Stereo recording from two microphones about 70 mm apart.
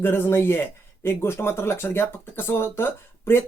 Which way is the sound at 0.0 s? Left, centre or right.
Left.